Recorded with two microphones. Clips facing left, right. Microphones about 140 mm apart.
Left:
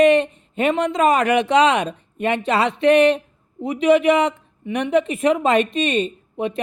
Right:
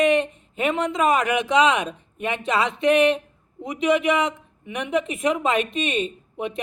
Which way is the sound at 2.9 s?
30° left (ahead or behind).